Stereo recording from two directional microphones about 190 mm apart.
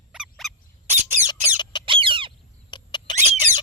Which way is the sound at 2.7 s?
25° left (ahead or behind).